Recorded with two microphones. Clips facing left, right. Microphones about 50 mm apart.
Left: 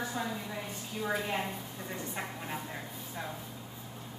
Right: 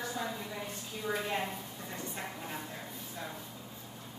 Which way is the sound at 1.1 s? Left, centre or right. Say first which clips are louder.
Even; centre.